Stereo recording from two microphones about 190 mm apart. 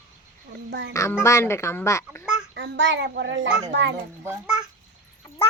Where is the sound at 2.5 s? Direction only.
65° right (ahead or behind).